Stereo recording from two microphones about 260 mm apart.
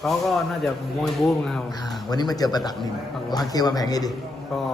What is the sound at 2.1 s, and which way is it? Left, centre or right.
A man's voice, centre.